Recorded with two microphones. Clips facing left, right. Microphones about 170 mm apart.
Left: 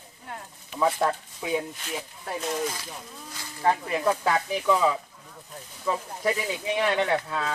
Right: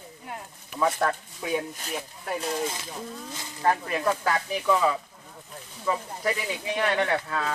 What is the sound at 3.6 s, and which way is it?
Speech, 15° left (ahead or behind).